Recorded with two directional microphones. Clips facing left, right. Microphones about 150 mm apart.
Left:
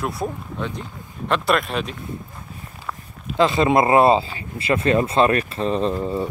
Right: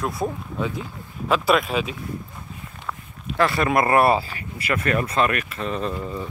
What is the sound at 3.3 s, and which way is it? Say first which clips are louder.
Speech: left 3 dB; 20° left (ahead or behind).